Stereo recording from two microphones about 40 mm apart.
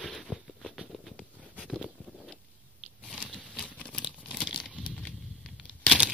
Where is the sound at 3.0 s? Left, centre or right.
Left.